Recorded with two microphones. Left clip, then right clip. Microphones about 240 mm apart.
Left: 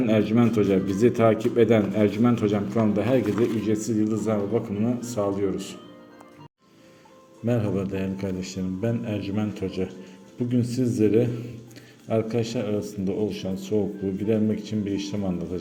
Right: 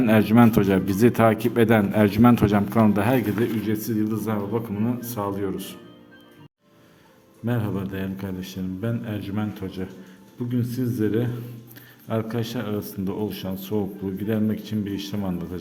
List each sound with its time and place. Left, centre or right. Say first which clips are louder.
0.0 s a man's voice: right 4 dB; right
7.4 s speech: left 3 dB; centre